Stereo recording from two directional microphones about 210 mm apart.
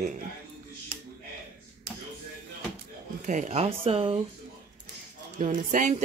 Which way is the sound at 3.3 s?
35° right (ahead or behind).